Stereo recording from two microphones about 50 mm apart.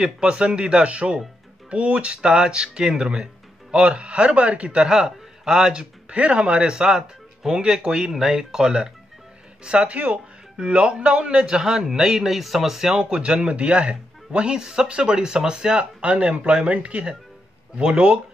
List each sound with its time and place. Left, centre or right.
0.2 s a man's voice: centre
13.0 s speech: right